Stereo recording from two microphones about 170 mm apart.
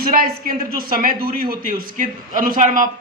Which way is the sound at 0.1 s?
60° right (ahead or behind).